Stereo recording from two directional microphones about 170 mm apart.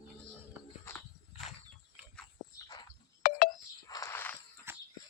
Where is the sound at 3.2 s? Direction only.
55° left (ahead or behind).